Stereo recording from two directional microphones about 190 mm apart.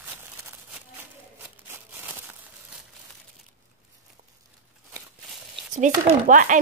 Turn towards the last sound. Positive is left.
turn(degrees=-45)  # may be behind; listen again after turning